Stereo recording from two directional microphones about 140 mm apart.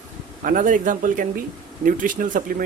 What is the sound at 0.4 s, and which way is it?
Speech, 70° right (ahead or behind).